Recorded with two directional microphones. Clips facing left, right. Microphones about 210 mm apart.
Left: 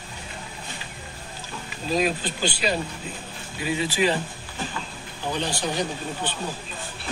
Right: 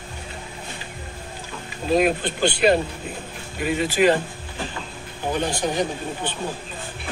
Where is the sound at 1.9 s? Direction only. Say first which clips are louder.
Right 5 dB; 55° right (ahead or behind).